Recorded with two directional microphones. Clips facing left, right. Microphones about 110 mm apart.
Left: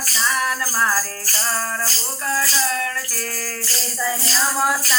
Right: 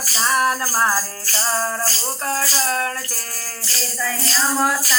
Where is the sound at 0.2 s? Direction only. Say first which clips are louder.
Right 3 dB; 40° right (ahead or behind).